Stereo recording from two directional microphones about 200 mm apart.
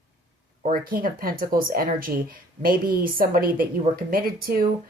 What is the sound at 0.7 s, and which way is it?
Speech, 45° right (ahead or behind).